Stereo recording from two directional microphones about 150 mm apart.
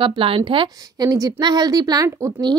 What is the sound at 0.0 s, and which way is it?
Speech, 35° right (ahead or behind).